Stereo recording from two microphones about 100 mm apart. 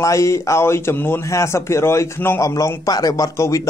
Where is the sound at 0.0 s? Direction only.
30° left (ahead or behind).